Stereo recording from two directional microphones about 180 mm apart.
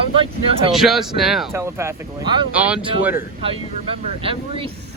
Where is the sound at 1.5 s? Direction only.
15° right (ahead or behind).